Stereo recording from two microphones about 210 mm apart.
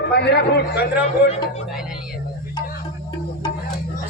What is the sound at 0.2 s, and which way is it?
Speech, 50° left (ahead or behind).